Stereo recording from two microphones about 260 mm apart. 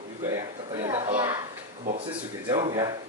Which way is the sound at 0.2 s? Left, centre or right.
Centre.